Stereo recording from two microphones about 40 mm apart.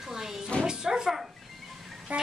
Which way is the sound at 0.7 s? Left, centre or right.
Centre.